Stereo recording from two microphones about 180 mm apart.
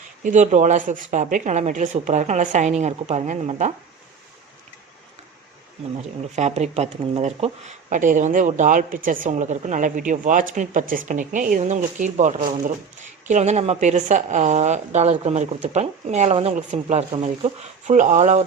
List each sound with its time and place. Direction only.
0.2 s speech: 45° right (ahead or behind)
6.0 s speech: 40° right (ahead or behind)